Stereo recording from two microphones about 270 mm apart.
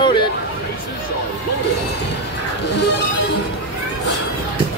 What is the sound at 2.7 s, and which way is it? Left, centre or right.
Music, left.